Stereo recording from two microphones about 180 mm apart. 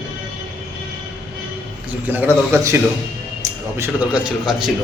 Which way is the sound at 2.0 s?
10° right (ahead or behind).